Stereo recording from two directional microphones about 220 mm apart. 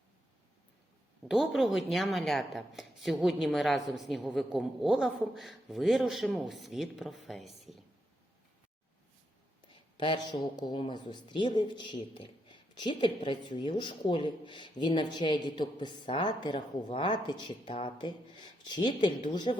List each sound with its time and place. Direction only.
1.3 s a woman's voice: centre (ahead or behind)
10.0 s speech: 20° left (ahead or behind)